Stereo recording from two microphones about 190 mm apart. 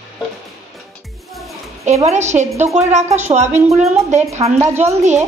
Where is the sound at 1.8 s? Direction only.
35° right (ahead or behind).